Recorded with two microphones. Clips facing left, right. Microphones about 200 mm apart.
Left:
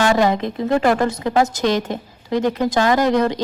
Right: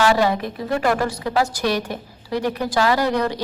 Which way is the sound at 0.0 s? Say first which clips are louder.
Left 2 dB; 20° left (ahead or behind).